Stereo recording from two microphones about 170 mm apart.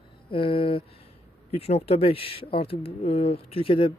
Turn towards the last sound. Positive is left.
turn(degrees=35)  # may be behind; listen again after turning